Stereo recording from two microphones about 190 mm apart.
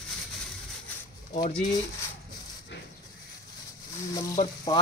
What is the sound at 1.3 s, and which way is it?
Speech, 40° left (ahead or behind).